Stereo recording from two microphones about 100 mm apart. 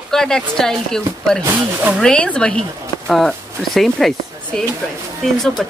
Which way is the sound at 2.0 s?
10° left (ahead or behind).